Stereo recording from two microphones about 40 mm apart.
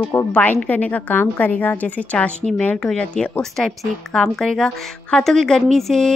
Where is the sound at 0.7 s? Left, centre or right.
Left.